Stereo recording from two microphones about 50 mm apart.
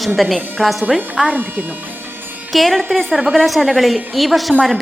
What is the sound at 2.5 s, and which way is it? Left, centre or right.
A woman's voice, centre.